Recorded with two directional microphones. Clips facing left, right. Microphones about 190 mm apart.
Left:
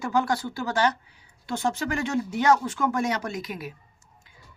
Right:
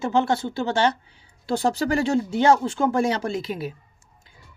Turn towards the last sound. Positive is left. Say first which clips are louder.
# right 6 dB
turn(degrees=-30)  # may be behind; listen again after turning